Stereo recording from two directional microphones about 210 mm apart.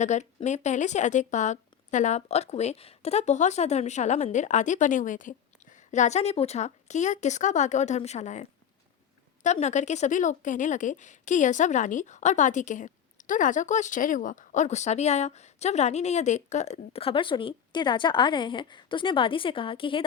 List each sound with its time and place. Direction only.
0.0 s a woman's voice: 35° left (ahead or behind)